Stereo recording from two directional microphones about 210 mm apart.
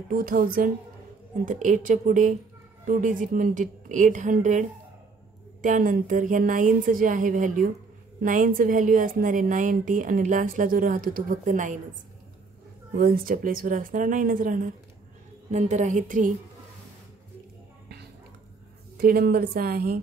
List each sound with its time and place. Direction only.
0.1 s a woman's voice: 40° right (ahead or behind)
12.9 s a woman's voice: 45° right (ahead or behind)
18.9 s a woman's voice: 45° right (ahead or behind)